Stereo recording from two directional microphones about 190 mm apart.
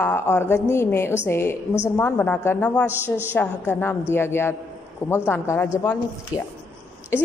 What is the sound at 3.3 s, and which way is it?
A woman's voice, 10° left (ahead or behind).